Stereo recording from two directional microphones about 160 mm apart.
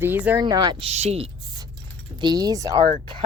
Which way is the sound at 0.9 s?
40° right (ahead or behind).